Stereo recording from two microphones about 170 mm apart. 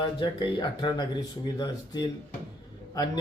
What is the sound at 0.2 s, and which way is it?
Speech, 25° left (ahead or behind).